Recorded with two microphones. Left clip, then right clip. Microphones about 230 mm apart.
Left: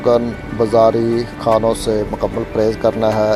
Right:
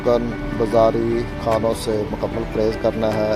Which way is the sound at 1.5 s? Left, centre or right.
Left.